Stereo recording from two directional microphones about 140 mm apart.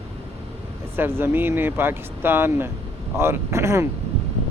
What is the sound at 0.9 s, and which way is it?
Speech, 15° right (ahead or behind).